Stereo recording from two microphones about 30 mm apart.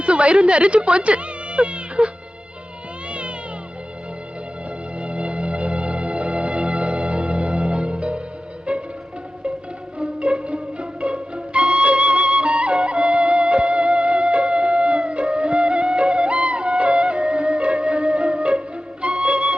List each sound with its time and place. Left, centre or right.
0.0 s speech: right
3.1 s cat: right
4.9 s music: right
10.0 s music: right